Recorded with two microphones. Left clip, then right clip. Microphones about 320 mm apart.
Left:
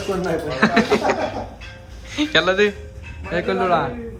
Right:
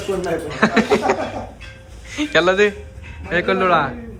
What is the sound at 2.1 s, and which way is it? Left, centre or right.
Speech, centre.